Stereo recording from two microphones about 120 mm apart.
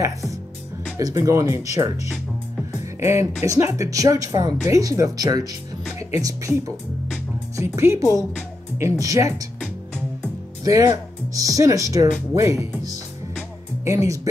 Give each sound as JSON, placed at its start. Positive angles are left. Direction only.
{"t": 0.9, "sound": "speech", "side_deg": -25}
{"t": 3.0, "sound": "speech", "side_deg": -25}
{"t": 10.6, "sound": "speech", "side_deg": -25}
{"t": 13.8, "sound": "speech", "side_deg": -25}